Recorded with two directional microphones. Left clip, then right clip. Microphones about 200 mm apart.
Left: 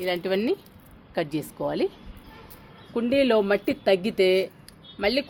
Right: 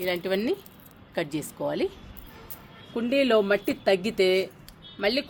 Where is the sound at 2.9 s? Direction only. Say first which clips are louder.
Left 1 dB; 30° left (ahead or behind).